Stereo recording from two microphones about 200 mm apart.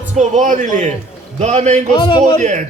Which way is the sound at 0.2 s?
40° right (ahead or behind).